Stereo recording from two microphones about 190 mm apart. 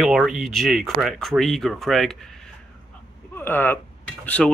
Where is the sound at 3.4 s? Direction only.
10° left (ahead or behind).